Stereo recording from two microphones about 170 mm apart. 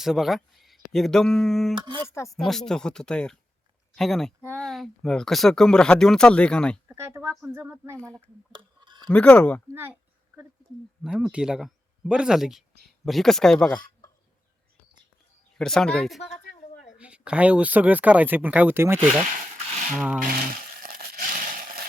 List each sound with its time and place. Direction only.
0.0 s speech: centre (ahead or behind)
1.7 s speech: 25° right (ahead or behind)
2.0 s speech: 15° left (ahead or behind)
2.3 s speech: centre (ahead or behind)
6.8 s speech: 15° right (ahead or behind)
8.5 s a sound: 25° right (ahead or behind)
9.0 s speech: 5° left (ahead or behind)
9.7 s a sound: 10° right (ahead or behind)
11.0 s speech: 5° right (ahead or behind)
15.5 s speech: 5° left (ahead or behind); by 18.9 s 15° right (ahead or behind)
19.3 s a sound: 40° right (ahead or behind)
20.2 s crumpling: 60° right (ahead or behind)